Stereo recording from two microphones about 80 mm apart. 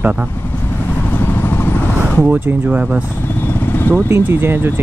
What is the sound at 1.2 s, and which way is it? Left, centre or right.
Vehicle, left.